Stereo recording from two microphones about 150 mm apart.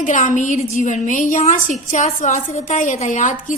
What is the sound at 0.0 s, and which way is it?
A woman's voice, 55° left (ahead or behind).